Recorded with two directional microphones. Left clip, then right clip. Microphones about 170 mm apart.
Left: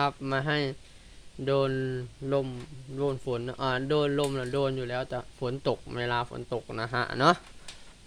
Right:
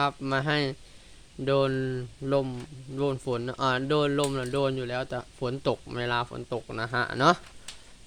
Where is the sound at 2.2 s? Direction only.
25° right (ahead or behind).